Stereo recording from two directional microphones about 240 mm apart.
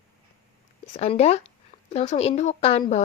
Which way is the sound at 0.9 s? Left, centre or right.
Left.